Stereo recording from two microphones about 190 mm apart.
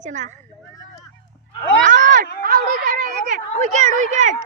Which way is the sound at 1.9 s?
40° right (ahead or behind).